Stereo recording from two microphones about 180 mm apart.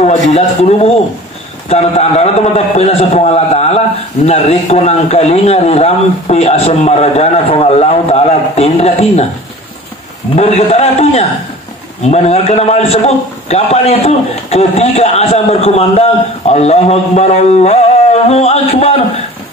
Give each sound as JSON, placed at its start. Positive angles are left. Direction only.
{"t": 0.0, "sound": "a man's voice", "side_deg": 40}
{"t": 10.3, "sound": "a man's voice", "side_deg": 35}